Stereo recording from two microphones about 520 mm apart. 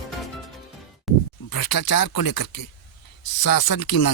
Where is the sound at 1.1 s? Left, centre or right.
Centre.